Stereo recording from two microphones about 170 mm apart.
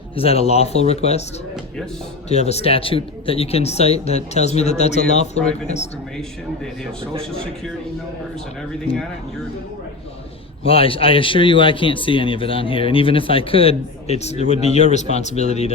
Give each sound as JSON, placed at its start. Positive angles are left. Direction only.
{"t": 0.2, "sound": "speech", "side_deg": 35}
{"t": 2.3, "sound": "speech", "side_deg": 40}
{"t": 7.0, "sound": "a man's voice", "side_deg": -30}
{"t": 10.7, "sound": "speech", "side_deg": 35}